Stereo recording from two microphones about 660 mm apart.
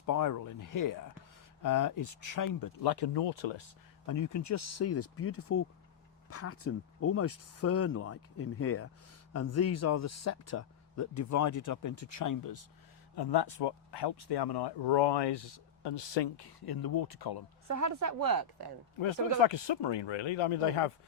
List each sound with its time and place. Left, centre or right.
0.0 s speech: left
4.0 s speech: left
17.7 s a woman's voice: right
19.4 s speech: left